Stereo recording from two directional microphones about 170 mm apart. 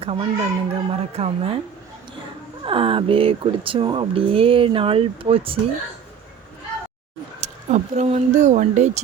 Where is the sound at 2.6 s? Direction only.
30° right (ahead or behind).